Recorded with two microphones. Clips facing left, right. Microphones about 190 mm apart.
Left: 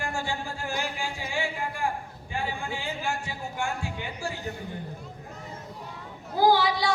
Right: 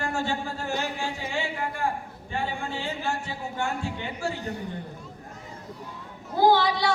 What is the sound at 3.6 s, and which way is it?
Speech, 25° right (ahead or behind).